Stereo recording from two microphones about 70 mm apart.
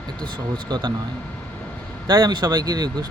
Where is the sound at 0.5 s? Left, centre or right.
Right.